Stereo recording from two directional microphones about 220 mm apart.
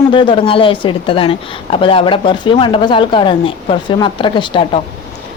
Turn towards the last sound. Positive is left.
turn(degrees=20)  # may be behind; listen again after turning